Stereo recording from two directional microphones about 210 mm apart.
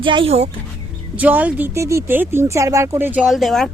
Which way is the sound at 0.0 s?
25° right (ahead or behind).